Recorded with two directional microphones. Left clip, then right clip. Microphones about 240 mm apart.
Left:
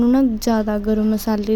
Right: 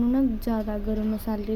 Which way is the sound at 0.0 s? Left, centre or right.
Left.